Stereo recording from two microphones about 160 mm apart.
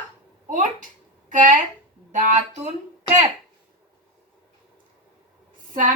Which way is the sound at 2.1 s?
50° right (ahead or behind).